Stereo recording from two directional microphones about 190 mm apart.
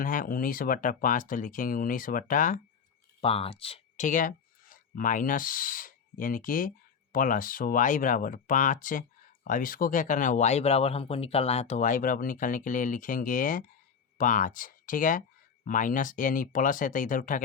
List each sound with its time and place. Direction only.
0.0 s speech: 45° left (ahead or behind)
3.2 s speech: 30° left (ahead or behind)